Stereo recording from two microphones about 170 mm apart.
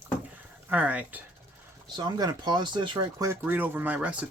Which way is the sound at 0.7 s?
10° right (ahead or behind).